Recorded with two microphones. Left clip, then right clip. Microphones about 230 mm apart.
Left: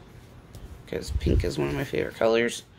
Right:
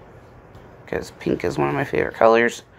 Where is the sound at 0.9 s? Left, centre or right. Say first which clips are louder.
Right 5 dB; centre.